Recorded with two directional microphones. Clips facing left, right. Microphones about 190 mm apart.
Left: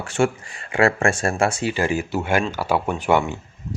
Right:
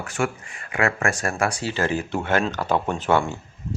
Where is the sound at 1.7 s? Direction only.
10° left (ahead or behind).